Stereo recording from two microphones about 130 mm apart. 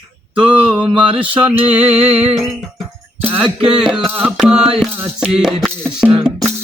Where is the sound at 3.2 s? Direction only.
15° right (ahead or behind).